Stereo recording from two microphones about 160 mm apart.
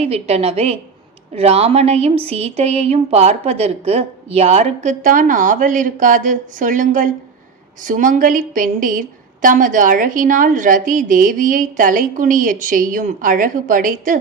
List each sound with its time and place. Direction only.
0.0 s a woman's voice: 40° right (ahead or behind); by 14.2 s 55° right (ahead or behind)